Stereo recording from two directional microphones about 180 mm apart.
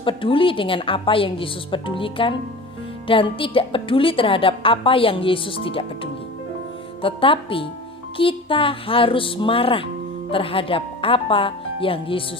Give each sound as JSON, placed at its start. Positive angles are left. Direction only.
{"t": 0.0, "sound": "a woman's voice", "side_deg": 30}